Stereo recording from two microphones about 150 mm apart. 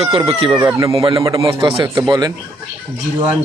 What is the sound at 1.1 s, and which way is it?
Speech, 20° right (ahead or behind).